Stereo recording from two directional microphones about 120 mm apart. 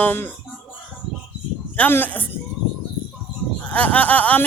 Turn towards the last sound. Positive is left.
turn(degrees=15)  # may be behind; listen again after turning